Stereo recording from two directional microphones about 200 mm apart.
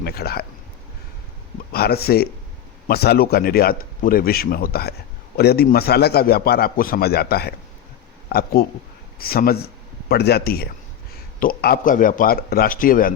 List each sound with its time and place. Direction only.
0.0 s speech: 50° left (ahead or behind)
1.7 s speech: 50° left (ahead or behind)